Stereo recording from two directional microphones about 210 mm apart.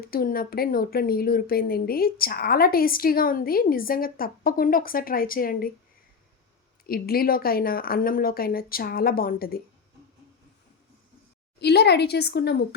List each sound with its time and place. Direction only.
0.0 s speech: 45° left (ahead or behind)
6.8 s speech: 45° left (ahead or behind)
11.6 s speech: 50° left (ahead or behind)